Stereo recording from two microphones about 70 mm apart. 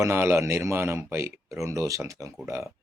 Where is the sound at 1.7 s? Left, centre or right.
Right.